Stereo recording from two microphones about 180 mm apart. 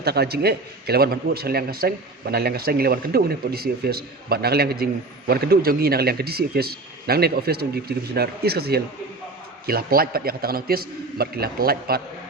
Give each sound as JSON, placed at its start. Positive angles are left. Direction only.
{"t": 0.0, "sound": "a man's voice", "side_deg": -60}